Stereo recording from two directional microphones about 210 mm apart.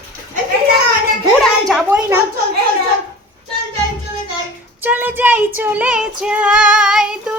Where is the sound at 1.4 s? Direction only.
Centre (ahead or behind).